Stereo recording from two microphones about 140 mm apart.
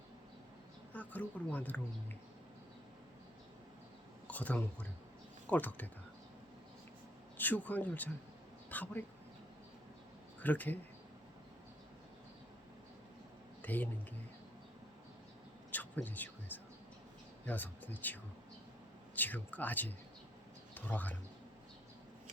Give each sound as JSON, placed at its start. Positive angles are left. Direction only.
{"t": 0.9, "sound": "speech", "side_deg": 10}
{"t": 4.3, "sound": "speech", "side_deg": 10}
{"t": 7.3, "sound": "speech", "side_deg": 10}
{"t": 10.4, "sound": "speech", "side_deg": 10}
{"t": 13.6, "sound": "speech", "side_deg": 10}
{"t": 15.7, "sound": "speech", "side_deg": 10}